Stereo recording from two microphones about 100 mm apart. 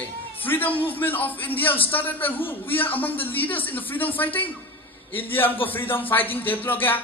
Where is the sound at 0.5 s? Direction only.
20° left (ahead or behind).